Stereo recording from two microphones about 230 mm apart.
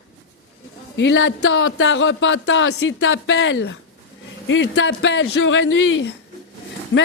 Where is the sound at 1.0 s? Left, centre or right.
Left.